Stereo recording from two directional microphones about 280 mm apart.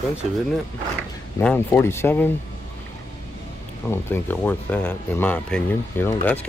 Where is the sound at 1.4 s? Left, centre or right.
Centre.